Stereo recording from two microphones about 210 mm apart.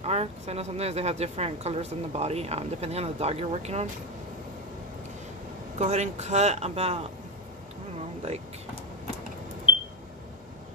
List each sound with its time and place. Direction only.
0.0 s speech: 30° right (ahead or behind)
5.8 s speech: 30° right (ahead or behind)